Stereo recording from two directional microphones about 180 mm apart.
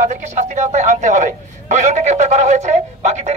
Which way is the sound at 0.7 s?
40° right (ahead or behind).